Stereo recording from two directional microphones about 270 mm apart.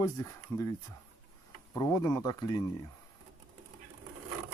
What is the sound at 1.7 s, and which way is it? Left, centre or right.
Speech, centre.